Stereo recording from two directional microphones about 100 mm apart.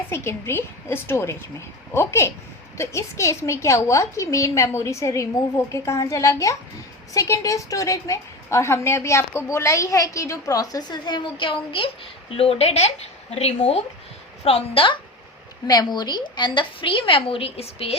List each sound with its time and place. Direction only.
0.1 s a woman's voice: 25° left (ahead or behind); by 11.9 s 60° left (ahead or behind)
12.4 s speech: 85° left
14.4 s a woman's voice: 75° left (ahead or behind)
15.6 s a woman's voice: 45° left (ahead or behind); by 17.9 s 80° left